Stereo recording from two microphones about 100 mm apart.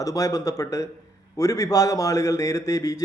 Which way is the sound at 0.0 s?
35° left (ahead or behind).